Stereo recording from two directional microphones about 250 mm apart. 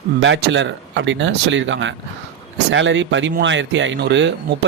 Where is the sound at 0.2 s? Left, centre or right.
Right.